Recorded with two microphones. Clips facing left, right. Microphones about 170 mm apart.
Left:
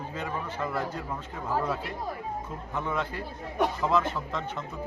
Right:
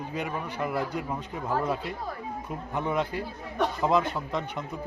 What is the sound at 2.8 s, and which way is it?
Speech, 15° right (ahead or behind).